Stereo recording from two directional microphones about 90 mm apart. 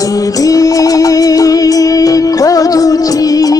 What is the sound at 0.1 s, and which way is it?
Music, 40° left (ahead or behind).